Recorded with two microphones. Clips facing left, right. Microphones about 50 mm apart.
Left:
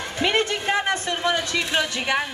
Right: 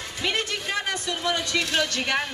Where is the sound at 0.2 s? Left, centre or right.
Left.